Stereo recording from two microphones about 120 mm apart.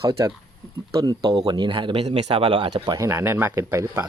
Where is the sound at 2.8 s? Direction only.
30° right (ahead or behind).